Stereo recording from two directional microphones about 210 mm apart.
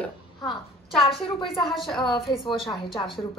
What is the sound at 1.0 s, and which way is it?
Speech, 25° left (ahead or behind).